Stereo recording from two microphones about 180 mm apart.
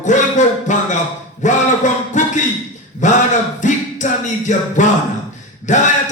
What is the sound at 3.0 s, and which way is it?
Speech, 40° left (ahead or behind).